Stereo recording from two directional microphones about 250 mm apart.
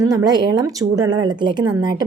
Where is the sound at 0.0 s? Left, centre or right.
Centre.